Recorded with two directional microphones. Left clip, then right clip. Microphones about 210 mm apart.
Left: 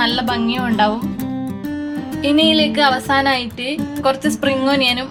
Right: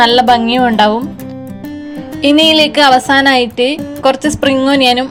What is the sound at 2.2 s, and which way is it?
Speech, 30° right (ahead or behind).